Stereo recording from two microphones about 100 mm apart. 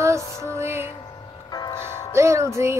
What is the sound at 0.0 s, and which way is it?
Music, 30° right (ahead or behind).